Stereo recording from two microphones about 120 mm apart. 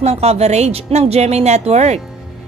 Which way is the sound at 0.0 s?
60° right (ahead or behind).